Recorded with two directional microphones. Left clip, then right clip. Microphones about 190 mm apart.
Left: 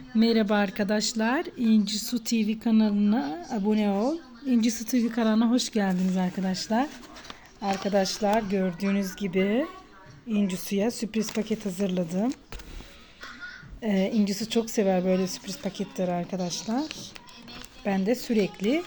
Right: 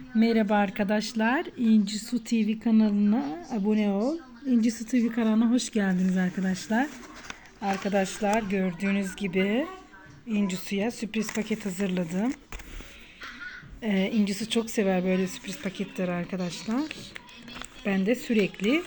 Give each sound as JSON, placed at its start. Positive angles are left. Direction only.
{"t": 0.2, "sound": "speech", "side_deg": 10}
{"t": 2.0, "sound": "speech", "side_deg": 35}
{"t": 2.2, "sound": "speech", "side_deg": 10}
{"t": 7.3, "sound": "a sound", "side_deg": 5}
{"t": 8.2, "sound": "speech", "side_deg": 5}
{"t": 13.8, "sound": "speech", "side_deg": 10}
{"t": 17.8, "sound": "speech", "side_deg": 5}